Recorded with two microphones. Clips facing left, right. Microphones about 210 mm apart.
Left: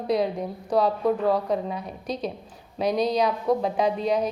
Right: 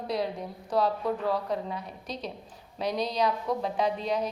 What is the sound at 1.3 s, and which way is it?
A woman's voice, 15° left (ahead or behind).